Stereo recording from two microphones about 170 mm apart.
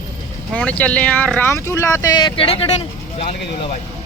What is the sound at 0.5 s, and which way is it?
Speech, 10° left (ahead or behind).